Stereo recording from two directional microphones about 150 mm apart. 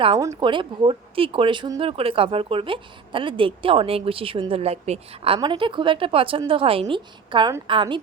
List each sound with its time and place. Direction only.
0.2 s speech: 20° right (ahead or behind)
0.4 s speech: 35° right (ahead or behind)
1.8 s speech: 40° right (ahead or behind)